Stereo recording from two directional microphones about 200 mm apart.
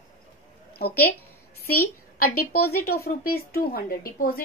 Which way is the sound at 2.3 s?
90° left.